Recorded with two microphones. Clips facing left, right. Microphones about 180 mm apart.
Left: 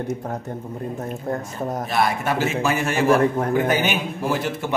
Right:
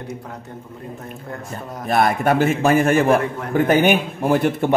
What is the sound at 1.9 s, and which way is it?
A man's voice, 50° right (ahead or behind).